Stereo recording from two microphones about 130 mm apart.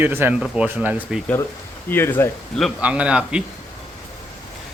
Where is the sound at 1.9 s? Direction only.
20° left (ahead or behind).